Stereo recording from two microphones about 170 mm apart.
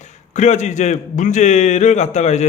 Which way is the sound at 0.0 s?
40° left (ahead or behind).